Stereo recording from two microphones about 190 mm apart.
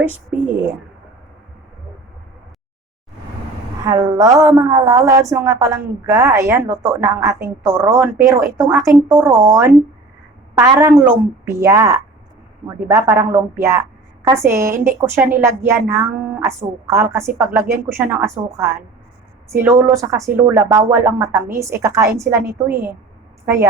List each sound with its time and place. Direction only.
3.8 s a woman's voice: 20° right (ahead or behind)